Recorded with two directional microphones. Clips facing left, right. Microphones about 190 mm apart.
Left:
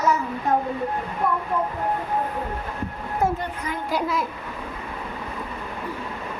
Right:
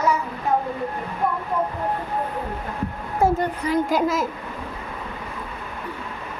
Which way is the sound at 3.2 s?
30° right (ahead or behind).